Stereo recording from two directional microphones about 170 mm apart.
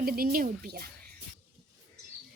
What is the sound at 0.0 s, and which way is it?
Speech, 60° right (ahead or behind).